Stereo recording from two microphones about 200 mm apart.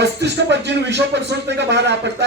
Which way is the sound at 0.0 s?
60° right (ahead or behind).